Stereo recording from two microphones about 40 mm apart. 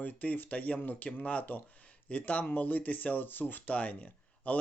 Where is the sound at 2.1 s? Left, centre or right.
Left.